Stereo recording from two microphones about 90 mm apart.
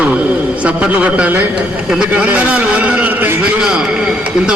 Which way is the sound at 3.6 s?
10° right (ahead or behind).